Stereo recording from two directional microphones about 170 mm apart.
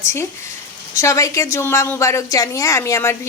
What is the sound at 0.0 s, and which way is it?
A woman's voice, 15° left (ahead or behind).